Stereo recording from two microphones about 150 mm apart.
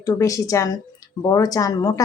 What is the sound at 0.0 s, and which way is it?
A woman's voice, 20° left (ahead or behind).